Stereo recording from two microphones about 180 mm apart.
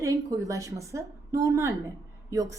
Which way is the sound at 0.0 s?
20° right (ahead or behind).